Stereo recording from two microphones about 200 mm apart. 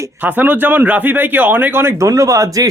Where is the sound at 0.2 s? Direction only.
10° right (ahead or behind).